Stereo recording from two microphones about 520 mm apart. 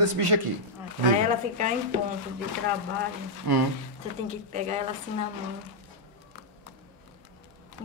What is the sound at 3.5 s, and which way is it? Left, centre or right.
Speech, right.